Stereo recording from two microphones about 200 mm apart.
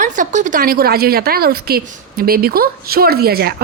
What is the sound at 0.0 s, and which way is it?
Speech, 40° right (ahead or behind).